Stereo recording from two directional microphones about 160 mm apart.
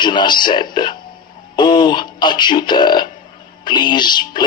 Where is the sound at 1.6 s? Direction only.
25° left (ahead or behind).